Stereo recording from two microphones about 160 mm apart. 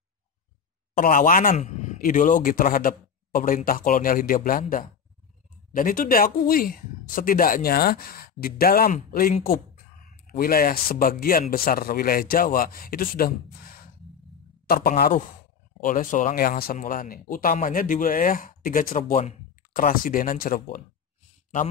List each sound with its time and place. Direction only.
0.9 s a man's voice: 55° left (ahead or behind)
16.7 s speech: 60° left (ahead or behind)